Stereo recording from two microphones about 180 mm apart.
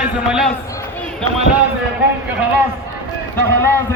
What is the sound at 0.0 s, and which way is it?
Speech, 5° right (ahead or behind).